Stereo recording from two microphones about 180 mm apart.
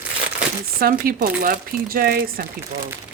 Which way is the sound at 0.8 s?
55° right (ahead or behind).